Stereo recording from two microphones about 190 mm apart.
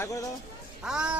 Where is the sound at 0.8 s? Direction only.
5° right (ahead or behind).